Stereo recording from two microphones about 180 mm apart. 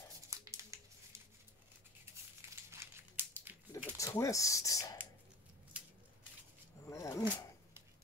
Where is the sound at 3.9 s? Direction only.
20° left (ahead or behind).